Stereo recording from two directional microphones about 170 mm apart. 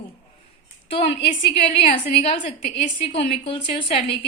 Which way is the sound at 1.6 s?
35° left (ahead or behind).